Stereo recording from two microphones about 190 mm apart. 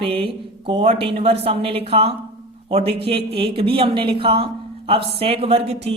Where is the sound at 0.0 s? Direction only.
30° right (ahead or behind).